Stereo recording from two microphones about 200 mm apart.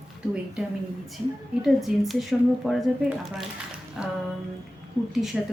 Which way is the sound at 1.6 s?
Centre (ahead or behind).